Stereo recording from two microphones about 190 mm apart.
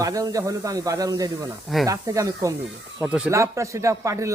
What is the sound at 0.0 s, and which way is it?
A man's voice, 20° right (ahead or behind).